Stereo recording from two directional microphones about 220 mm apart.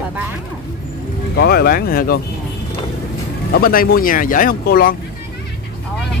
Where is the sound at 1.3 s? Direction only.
45° left (ahead or behind).